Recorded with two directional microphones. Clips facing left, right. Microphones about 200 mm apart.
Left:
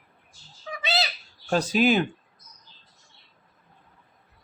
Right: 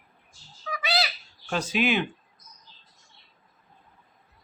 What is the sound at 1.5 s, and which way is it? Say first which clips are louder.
Speech: left 4 dB; 40° left (ahead or behind).